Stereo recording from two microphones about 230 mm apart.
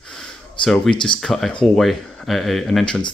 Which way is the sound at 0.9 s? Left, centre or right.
Left.